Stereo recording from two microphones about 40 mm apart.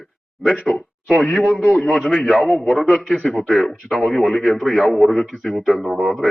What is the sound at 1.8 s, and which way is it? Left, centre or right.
Speech, centre.